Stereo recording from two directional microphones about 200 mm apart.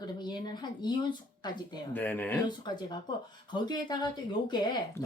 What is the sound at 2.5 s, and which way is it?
Speech, 20° left (ahead or behind).